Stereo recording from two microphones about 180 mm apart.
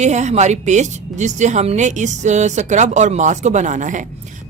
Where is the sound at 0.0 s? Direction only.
40° right (ahead or behind).